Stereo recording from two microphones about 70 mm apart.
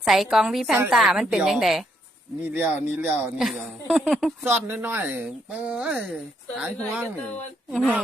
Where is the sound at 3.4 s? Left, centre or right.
Centre.